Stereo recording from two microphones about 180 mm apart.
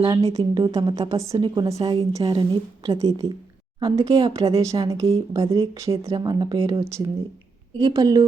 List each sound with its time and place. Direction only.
0.0 s a woman's voice: 20° right (ahead or behind)
2.2 s a woman's voice: 30° right (ahead or behind)